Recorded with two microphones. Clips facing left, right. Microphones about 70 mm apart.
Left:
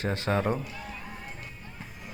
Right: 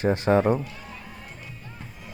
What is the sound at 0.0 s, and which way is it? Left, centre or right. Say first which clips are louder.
Speech: right 7 dB; right.